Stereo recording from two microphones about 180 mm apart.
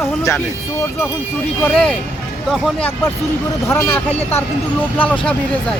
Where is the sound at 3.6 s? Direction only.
15° left (ahead or behind).